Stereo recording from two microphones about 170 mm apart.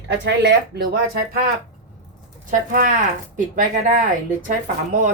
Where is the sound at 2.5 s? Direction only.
50° right (ahead or behind).